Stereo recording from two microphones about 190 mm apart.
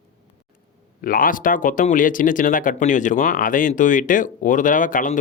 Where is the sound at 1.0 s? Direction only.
50° left (ahead or behind).